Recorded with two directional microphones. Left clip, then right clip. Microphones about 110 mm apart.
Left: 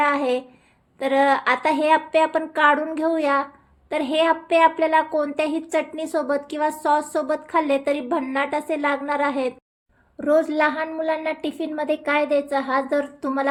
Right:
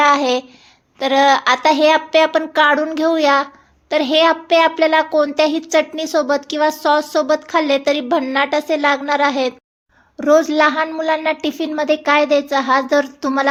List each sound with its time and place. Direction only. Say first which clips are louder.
0.0 s speech: right 7 dB; 25° right (ahead or behind)
10.2 s a woman's voice: right 6 dB; 35° right (ahead or behind)